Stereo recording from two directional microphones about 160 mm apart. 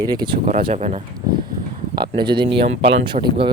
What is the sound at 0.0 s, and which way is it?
Speech, 25° right (ahead or behind).